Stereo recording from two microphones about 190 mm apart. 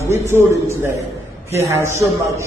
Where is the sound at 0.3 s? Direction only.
15° right (ahead or behind).